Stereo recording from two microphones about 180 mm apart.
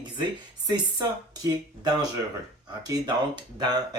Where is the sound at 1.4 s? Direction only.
20° right (ahead or behind).